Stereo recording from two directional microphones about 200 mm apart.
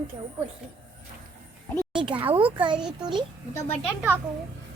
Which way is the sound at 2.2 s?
25° right (ahead or behind).